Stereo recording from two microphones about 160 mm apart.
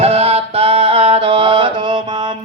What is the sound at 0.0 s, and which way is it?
Music, 40° right (ahead or behind).